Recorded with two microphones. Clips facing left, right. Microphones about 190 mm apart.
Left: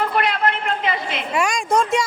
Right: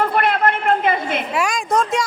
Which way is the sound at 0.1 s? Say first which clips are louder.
Right 3 dB; 50° right (ahead or behind).